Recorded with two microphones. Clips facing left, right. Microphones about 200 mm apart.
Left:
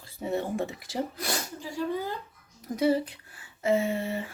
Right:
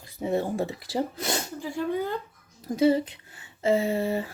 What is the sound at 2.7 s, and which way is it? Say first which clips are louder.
A woman's voice: right 3 dB; 25° right (ahead or behind).